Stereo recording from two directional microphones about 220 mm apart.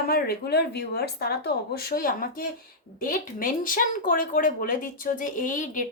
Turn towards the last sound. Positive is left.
turn(degrees=35)  # may be behind; listen again after turning